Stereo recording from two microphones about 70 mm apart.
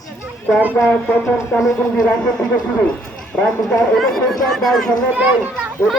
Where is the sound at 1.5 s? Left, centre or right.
Centre.